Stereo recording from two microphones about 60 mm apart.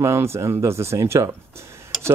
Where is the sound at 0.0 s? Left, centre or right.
Right.